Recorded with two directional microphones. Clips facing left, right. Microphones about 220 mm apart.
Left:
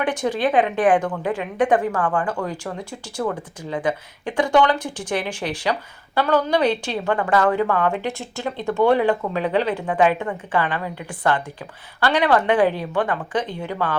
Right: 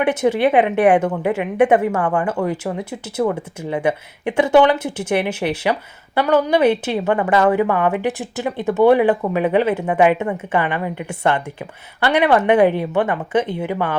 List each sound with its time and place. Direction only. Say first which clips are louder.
0.0 s a woman's voice: right 6 dB; 20° right (ahead or behind)
0.3 s speech: right 4 dB; 10° right (ahead or behind)
0.9 s a woman's voice: right 4 dB; 25° right (ahead or behind)